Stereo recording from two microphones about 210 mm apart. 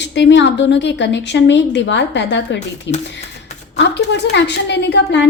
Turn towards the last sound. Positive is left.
turn(degrees=55)  # may be behind; listen again after turning